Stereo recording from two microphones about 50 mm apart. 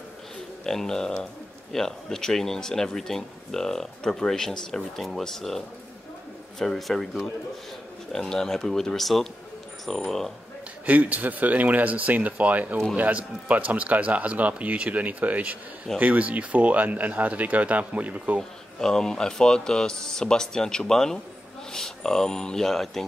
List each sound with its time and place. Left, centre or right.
0.7 s speech: centre
6.6 s speech: centre
8.1 s speech: centre
10.9 s speech: right
18.4 s speech: centre